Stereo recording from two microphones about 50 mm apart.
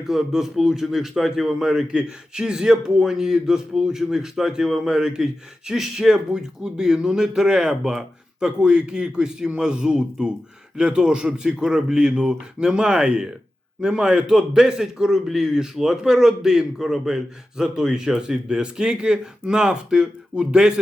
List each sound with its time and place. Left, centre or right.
0.0 s speech: centre